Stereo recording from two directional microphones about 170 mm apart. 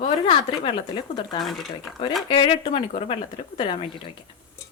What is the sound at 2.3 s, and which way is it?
Speech, 30° left (ahead or behind).